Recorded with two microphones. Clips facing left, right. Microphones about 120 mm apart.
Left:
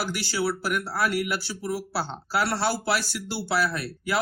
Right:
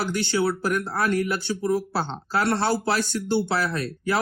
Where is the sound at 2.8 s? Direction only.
25° right (ahead or behind).